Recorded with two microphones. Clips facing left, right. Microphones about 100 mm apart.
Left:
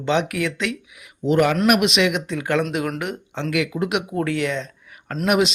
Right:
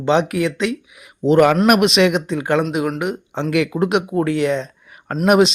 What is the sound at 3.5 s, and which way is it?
Speech, 40° right (ahead or behind).